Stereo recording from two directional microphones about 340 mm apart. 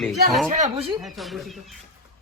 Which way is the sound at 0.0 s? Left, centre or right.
Centre.